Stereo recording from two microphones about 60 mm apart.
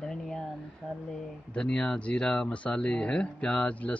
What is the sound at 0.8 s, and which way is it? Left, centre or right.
Speech, centre.